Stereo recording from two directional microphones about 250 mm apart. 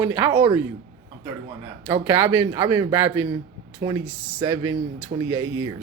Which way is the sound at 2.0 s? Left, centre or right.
Centre.